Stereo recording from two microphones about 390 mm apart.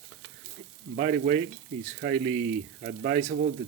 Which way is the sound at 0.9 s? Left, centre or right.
Centre.